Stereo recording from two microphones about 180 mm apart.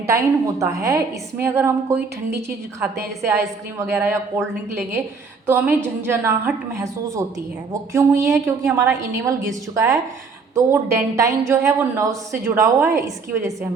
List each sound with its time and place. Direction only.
0.6 s a woman's voice: 15° right (ahead or behind)
3.2 s a woman's voice: 15° right (ahead or behind)